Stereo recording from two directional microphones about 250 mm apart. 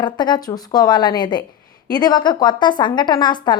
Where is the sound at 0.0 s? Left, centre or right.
Centre.